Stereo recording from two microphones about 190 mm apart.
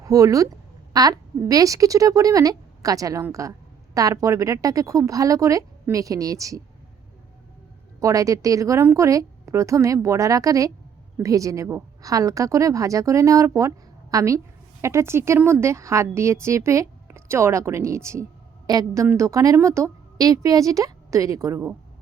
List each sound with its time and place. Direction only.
0.0 s a woman's voice: 20° right (ahead or behind)
7.9 s a woman's voice: 15° right (ahead or behind)